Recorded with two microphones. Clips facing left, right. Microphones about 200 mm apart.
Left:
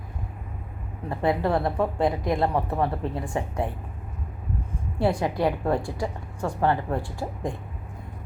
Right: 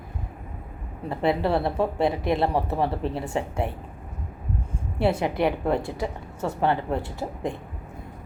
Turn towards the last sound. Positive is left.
turn(degrees=-20)  # may be behind; listen again after turning